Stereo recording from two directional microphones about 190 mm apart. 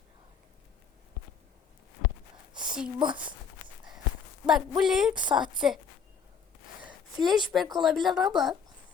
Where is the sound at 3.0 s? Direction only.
25° right (ahead or behind).